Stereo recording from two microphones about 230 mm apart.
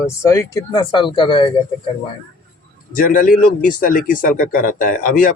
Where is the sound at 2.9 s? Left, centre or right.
Left.